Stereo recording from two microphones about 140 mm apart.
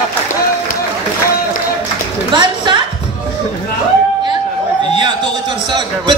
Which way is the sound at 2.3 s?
35° right (ahead or behind).